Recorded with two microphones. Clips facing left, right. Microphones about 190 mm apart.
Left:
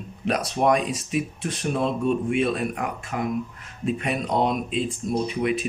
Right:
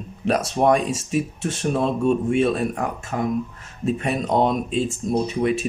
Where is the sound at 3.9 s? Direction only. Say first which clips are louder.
Right 3 dB; 40° right (ahead or behind).